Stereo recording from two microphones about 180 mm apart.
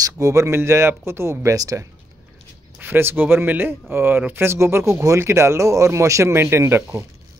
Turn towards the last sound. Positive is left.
turn(degrees=-15)  # may be behind; listen again after turning